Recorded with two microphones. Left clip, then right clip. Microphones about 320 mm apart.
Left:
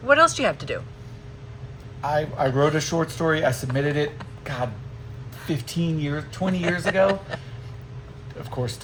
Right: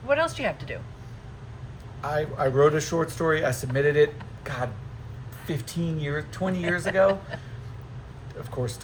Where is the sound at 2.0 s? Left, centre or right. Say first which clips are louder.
Left 3 dB; centre.